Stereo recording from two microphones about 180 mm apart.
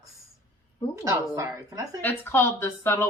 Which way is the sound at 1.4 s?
15° right (ahead or behind).